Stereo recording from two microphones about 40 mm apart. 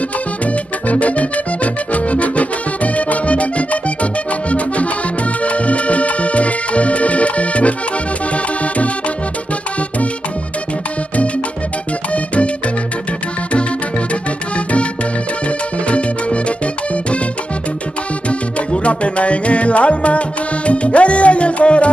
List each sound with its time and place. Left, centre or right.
0.8 s music: left
13.5 s music: left
15.4 s music: left
18.7 s music: left